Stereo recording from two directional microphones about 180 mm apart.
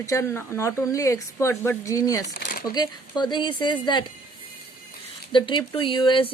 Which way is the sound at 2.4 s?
50° left (ahead or behind).